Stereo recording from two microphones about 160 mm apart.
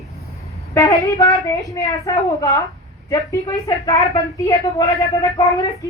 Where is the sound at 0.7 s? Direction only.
20° left (ahead or behind).